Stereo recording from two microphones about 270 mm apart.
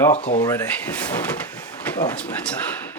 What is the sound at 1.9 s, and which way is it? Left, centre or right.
Speech, centre.